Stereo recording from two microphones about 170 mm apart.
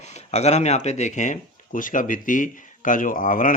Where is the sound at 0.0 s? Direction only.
40° left (ahead or behind).